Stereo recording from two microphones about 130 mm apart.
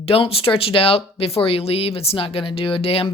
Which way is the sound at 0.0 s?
50° left (ahead or behind).